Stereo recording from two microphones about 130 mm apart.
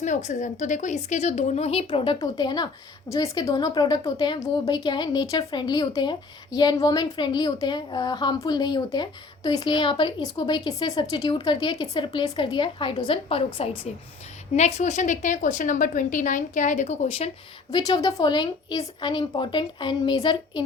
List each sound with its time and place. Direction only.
0.0 s speech: 65° left (ahead or behind)
1.9 s a woman's voice: 40° left (ahead or behind)
14.5 s a woman's voice: 60° left (ahead or behind)
17.7 s a woman's voice: 35° left (ahead or behind)